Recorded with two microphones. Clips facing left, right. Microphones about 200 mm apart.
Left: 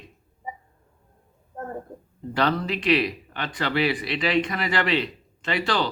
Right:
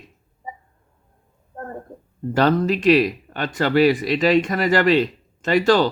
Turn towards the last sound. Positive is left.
turn(degrees=-45)  # may be behind; listen again after turning